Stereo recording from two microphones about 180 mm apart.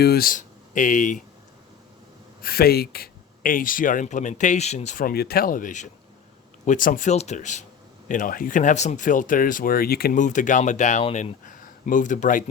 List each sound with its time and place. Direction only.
0.0 s speech: 60° left (ahead or behind); by 1.2 s 45° left (ahead or behind)
2.4 s speech: 60° left (ahead or behind)